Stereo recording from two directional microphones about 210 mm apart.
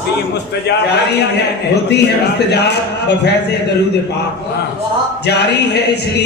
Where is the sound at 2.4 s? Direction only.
55° left (ahead or behind).